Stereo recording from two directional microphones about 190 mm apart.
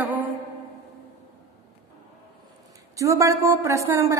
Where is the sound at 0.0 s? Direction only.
10° right (ahead or behind).